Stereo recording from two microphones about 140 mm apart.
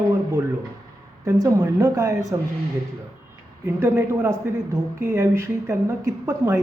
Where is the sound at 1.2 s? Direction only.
25° right (ahead or behind).